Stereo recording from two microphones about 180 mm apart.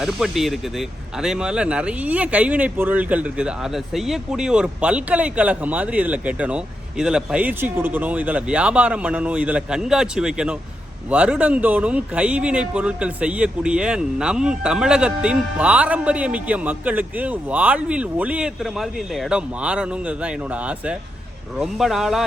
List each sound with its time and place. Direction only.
0.0 s speech: centre (ahead or behind)